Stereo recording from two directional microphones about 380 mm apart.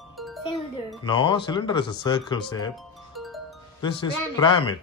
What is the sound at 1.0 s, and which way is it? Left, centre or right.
Speech, centre.